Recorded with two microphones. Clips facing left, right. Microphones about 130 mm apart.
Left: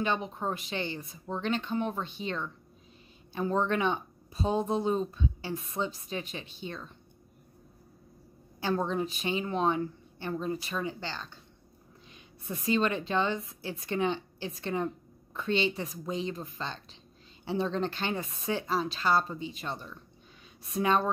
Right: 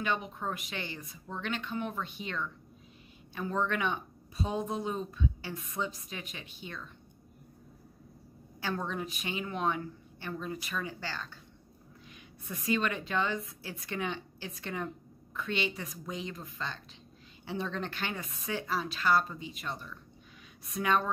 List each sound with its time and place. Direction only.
0.0 s speech: 30° left (ahead or behind)
8.5 s speech: 30° left (ahead or behind)